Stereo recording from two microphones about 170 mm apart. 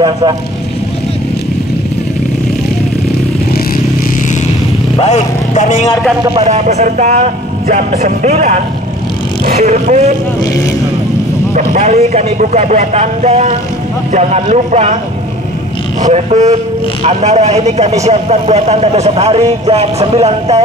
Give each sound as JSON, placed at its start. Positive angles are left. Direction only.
{"t": 0.0, "sound": "speech", "side_deg": -25}
{"t": 4.9, "sound": "vehicle", "side_deg": 40}
{"t": 6.4, "sound": "a man's voice", "side_deg": -40}
{"t": 11.5, "sound": "a man's voice", "side_deg": -45}
{"t": 16.0, "sound": "a man's voice", "side_deg": -40}